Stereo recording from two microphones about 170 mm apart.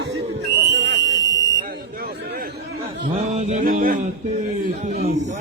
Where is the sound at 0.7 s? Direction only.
90° right.